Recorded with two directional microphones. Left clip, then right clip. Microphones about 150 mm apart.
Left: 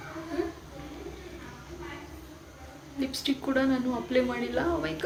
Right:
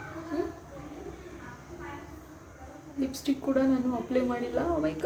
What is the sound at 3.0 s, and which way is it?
A woman's voice, 5° right (ahead or behind).